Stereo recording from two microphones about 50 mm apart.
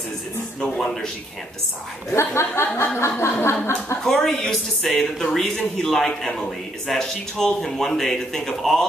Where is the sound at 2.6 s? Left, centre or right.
Left.